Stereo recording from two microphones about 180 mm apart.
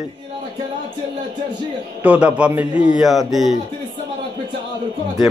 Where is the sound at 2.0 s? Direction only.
5° right (ahead or behind).